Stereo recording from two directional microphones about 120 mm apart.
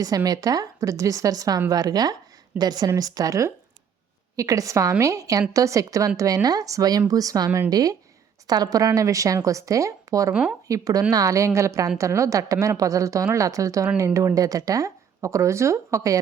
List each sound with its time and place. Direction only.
0.3 s a woman's voice: 30° right (ahead or behind)